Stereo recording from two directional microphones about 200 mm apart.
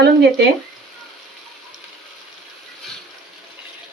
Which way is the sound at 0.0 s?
55° right (ahead or behind).